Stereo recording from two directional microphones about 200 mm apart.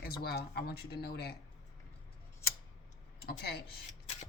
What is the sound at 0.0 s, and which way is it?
A woman's voice, 50° left (ahead or behind).